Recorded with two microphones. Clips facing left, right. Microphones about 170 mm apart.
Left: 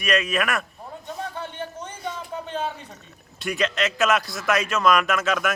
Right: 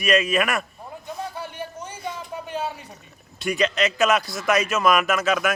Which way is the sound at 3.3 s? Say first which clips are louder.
Right 2 dB; centre (ahead or behind).